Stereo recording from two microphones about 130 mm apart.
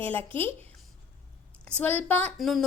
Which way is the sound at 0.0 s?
15° left (ahead or behind).